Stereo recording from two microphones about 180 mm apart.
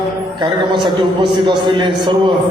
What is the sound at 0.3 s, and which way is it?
A man's voice, 25° right (ahead or behind).